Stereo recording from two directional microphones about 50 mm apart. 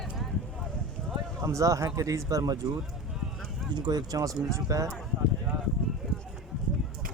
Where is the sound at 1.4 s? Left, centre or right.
Right.